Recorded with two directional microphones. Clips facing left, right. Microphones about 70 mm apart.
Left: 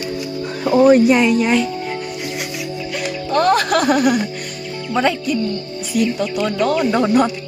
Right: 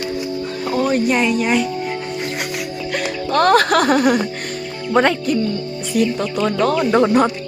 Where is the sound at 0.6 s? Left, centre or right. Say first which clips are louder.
Left 8 dB; centre.